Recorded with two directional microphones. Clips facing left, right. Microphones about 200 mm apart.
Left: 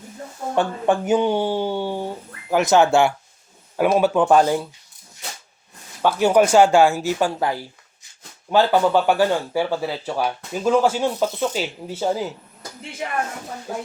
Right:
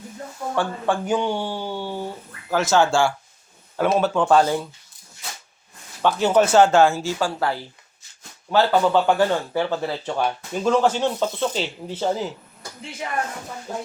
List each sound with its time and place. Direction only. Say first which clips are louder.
0.5 s speech: left 4 dB; 20° left (ahead or behind)
6.0 s speech: left 2 dB; 10° left (ahead or behind)